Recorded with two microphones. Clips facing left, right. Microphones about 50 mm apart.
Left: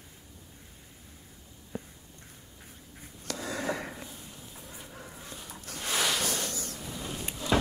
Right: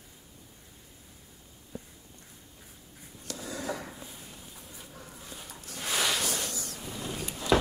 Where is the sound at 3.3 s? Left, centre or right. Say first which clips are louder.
Left 3 dB; left.